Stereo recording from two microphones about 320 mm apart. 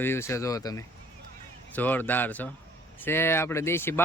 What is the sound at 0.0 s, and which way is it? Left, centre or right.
Speech, centre.